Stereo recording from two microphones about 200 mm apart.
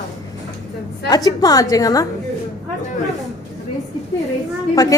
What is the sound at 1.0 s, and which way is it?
A woman's voice, 20° left (ahead or behind).